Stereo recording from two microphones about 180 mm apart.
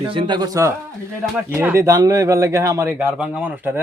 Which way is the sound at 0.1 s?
25° right (ahead or behind).